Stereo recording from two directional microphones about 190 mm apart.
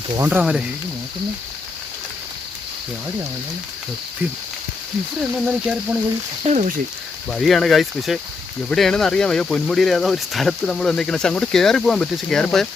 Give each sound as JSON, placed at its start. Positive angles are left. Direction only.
{"t": 0.3, "sound": "speech", "side_deg": -5}
{"t": 5.5, "sound": "speech", "side_deg": -5}
{"t": 6.4, "sound": "speech", "side_deg": -40}
{"t": 7.3, "sound": "speech", "side_deg": 0}